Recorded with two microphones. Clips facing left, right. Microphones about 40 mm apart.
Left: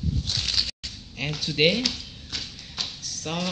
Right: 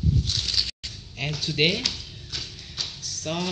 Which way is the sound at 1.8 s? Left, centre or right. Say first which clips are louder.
Left 2 dB; left.